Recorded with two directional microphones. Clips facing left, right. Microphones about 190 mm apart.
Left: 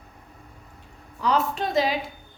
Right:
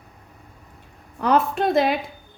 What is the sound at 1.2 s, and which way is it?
Speech, 55° right (ahead or behind).